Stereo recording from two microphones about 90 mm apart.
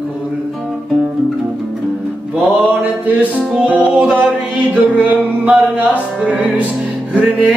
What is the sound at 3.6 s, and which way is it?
Music, 15° right (ahead or behind).